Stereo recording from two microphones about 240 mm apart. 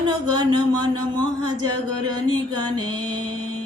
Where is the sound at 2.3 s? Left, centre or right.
Centre.